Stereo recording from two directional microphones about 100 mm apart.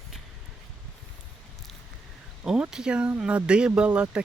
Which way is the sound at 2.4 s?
5° right (ahead or behind).